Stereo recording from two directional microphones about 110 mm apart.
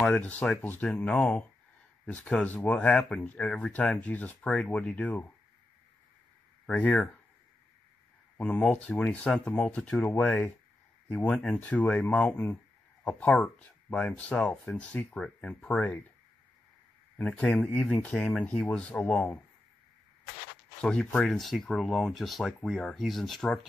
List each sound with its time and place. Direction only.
0.0 s speech: 10° left (ahead or behind)
6.6 s speech: 5° left (ahead or behind)
8.4 s speech: 10° left (ahead or behind)
17.2 s speech: 10° left (ahead or behind)
20.8 s speech: 10° left (ahead or behind)